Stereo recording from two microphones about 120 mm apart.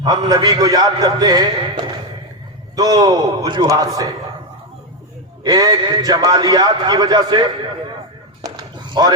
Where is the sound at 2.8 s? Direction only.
35° right (ahead or behind).